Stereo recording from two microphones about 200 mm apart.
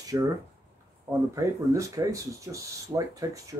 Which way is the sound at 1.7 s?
15° right (ahead or behind).